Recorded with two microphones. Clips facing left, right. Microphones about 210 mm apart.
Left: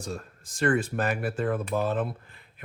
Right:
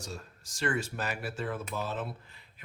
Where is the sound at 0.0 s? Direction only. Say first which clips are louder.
Left 7 dB; 55° left (ahead or behind).